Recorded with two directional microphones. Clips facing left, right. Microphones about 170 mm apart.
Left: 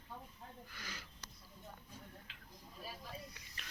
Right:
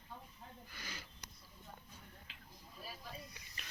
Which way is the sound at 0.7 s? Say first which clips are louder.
Right 2 dB; 25° right (ahead or behind).